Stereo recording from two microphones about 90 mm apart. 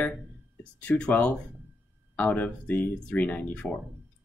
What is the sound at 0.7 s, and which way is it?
Speech, 10° left (ahead or behind).